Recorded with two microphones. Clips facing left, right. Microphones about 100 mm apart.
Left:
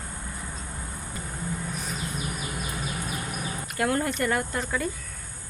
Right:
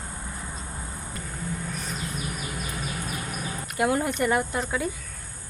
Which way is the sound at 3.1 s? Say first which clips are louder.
Even; 5° left (ahead or behind).